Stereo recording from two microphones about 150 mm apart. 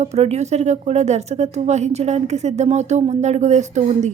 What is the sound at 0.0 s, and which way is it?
Speech, 45° right (ahead or behind).